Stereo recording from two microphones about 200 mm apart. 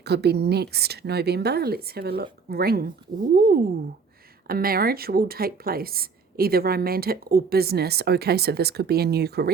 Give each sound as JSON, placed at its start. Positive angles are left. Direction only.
{"t": 0.0, "sound": "a woman's voice", "side_deg": -55}